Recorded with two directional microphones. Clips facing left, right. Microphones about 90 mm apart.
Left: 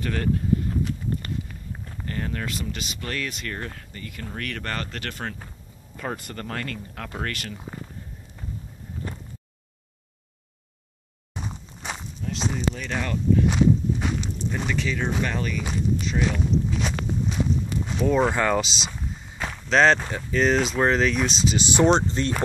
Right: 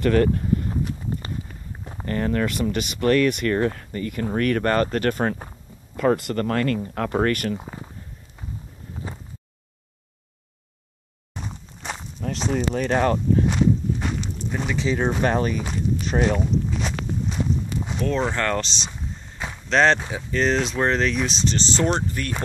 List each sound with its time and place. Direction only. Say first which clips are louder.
0.0 s speech: right 7 dB; 50° right (ahead or behind)
2.0 s speech: right 8 dB; 45° right (ahead or behind)
5.9 s speech: right 12 dB; 85° right
6.3 s speech: right 10 dB; 50° right (ahead or behind)
11.3 s walk: even; 5° left (ahead or behind)
12.2 s speech: right 5 dB; 55° right (ahead or behind)
13.5 s walk: even; 5° left (ahead or behind)
14.5 s speech: right 2 dB; 5° right (ahead or behind)
15.0 s speech: right 5 dB; 40° right (ahead or behind)
16.3 s walk: even; centre (ahead or behind)
17.9 s speech: left 3 dB; 5° left (ahead or behind)
18.9 s speech: even; 10° right (ahead or behind); by 22.3 s 25° left (ahead or behind)